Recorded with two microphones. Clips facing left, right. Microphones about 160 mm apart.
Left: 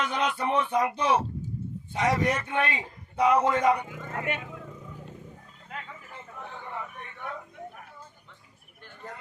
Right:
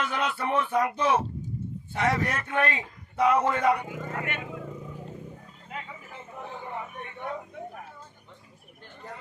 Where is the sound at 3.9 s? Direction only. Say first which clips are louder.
Left 1 dB; 10° right (ahead or behind).